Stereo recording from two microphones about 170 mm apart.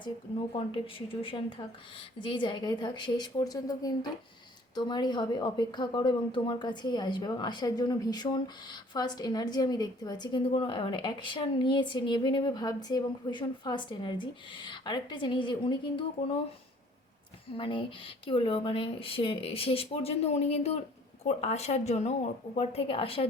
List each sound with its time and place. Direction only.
0.5 s speech: 30° left (ahead or behind)
17.6 s speech: 30° left (ahead or behind)